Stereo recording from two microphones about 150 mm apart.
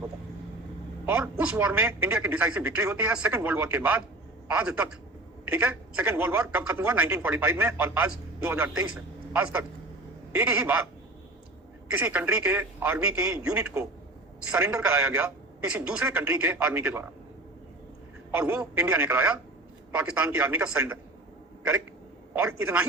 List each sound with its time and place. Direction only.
1.0 s a man's voice: 10° right (ahead or behind)
11.9 s speech: 10° right (ahead or behind)
13.6 s a man's voice: 20° right (ahead or behind)
14.5 s speech: 5° right (ahead or behind)
18.3 s speech: 10° right (ahead or behind)
22.4 s speech: 10° right (ahead or behind)